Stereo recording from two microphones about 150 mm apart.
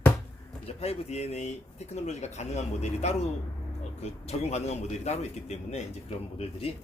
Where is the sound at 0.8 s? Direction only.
45° left (ahead or behind).